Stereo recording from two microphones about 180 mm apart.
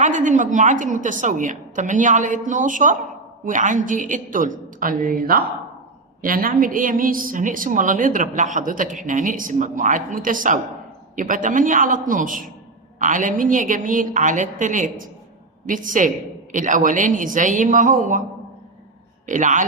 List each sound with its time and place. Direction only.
0.0 s a woman's voice: 45° right (ahead or behind)
19.2 s a woman's voice: 45° right (ahead or behind)